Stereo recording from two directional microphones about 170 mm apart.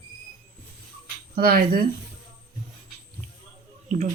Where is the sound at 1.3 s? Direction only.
65° right (ahead or behind).